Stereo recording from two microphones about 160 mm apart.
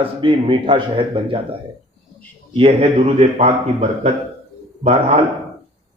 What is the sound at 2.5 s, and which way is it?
Speech, 40° right (ahead or behind).